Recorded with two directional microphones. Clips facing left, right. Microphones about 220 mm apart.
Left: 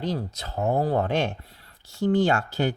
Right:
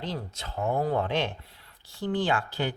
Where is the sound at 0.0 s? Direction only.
40° left (ahead or behind).